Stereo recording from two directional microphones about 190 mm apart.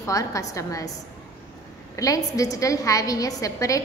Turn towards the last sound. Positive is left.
turn(degrees=15)  # may be behind; listen again after turning